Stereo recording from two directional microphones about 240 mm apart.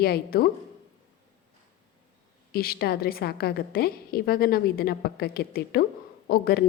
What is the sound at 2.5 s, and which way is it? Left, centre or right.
A woman's voice, left.